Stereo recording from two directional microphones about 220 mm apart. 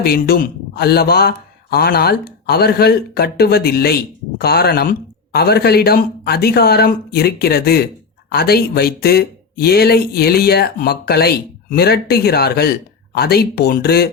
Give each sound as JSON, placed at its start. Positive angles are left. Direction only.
{"t": 0.0, "sound": "speech", "side_deg": 45}